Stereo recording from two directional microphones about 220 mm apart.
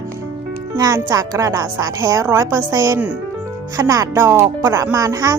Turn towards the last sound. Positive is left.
turn(degrees=-15)  # may be behind; listen again after turning